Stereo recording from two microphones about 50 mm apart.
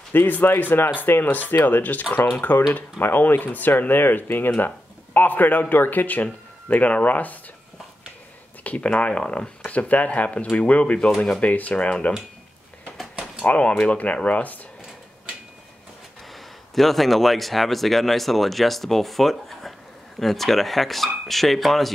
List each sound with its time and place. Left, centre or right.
0.1 s speech: left
8.6 s speech: left
9.7 s speech: left
11.1 s speech: centre
11.4 s speech: left
13.5 s speech: left
16.7 s speech: centre